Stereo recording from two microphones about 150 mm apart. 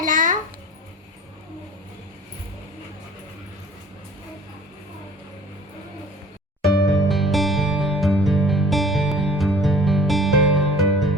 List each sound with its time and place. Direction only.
0.0 s babbling: 60° right (ahead or behind)
6.6 s music: centre (ahead or behind)